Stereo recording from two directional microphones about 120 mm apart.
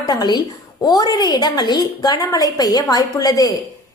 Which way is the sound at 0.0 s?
35° left (ahead or behind).